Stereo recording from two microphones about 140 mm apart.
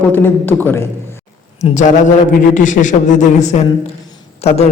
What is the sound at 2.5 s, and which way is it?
A man's voice, 65° left (ahead or behind).